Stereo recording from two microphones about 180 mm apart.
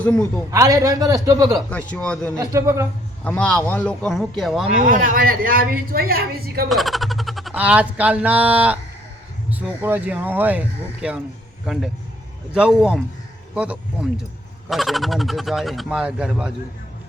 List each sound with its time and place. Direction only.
0.0 s speech: 5° left (ahead or behind)
0.5 s a man's voice: 15° right (ahead or behind)
1.7 s speech: 5° left (ahead or behind)
2.4 s speech: 15° right (ahead or behind)
3.2 s speech: 5° left (ahead or behind)
4.8 s a woman's voice: 50° right (ahead or behind)
6.7 s speech: centre (ahead or behind)